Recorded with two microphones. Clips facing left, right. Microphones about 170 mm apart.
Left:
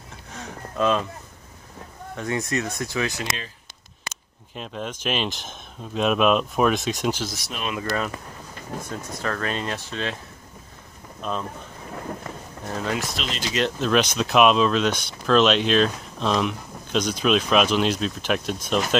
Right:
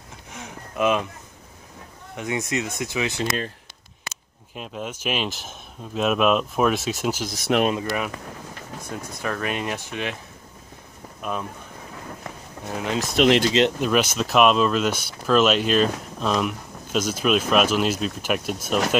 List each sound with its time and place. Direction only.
0.3 s a sound: 20° right (ahead or behind)
2.1 s speech: 20° right (ahead or behind)
4.6 s speech: 5° right (ahead or behind)
7.5 s speech: 70° right (ahead or behind)
7.8 s speech: 10° right (ahead or behind)
11.1 s speech: 10° right (ahead or behind)
12.6 s speech: 20° right (ahead or behind)
13.1 s speech: 55° right (ahead or behind)
13.5 s speech: 20° right (ahead or behind)
13.7 s speech: 10° right (ahead or behind)